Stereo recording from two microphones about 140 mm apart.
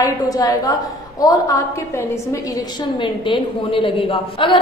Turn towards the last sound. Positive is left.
turn(degrees=40)  # may be behind; listen again after turning